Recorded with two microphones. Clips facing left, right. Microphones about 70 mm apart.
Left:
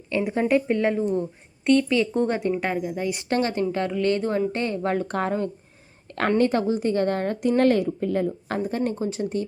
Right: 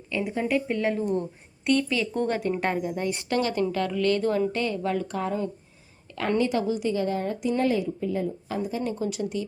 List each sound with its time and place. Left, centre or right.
0.3 s speech: left
0.5 s speech: left
2.5 s speech: centre
3.2 s speech: left
9.0 s speech: left